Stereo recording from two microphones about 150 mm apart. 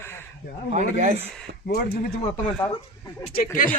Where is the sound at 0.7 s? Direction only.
50° right (ahead or behind).